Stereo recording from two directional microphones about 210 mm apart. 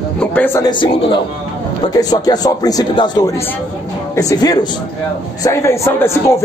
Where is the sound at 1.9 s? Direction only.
20° left (ahead or behind).